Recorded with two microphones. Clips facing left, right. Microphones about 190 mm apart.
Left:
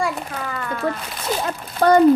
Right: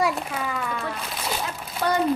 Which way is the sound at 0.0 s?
5° right (ahead or behind).